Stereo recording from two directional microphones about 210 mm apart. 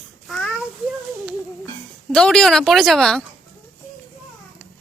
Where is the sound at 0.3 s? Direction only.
Centre (ahead or behind).